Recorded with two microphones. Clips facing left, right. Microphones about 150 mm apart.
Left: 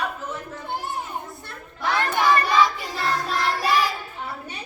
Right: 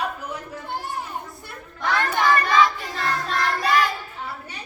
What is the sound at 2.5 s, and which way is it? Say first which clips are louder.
Child singing: right 1 dB; 5° left (ahead or behind).